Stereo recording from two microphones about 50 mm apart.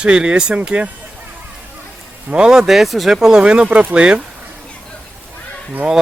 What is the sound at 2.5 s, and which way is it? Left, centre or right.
Speech, centre.